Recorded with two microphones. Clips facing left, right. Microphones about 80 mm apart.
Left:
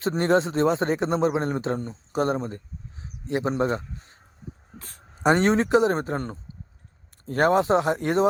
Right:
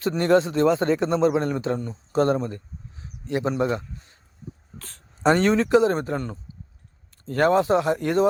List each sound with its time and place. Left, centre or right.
0.1 s speech: left
2.1 s a man's voice: centre
4.8 s speech: centre